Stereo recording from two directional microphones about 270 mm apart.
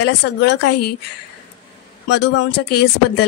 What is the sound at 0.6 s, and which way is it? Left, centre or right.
Speech, left.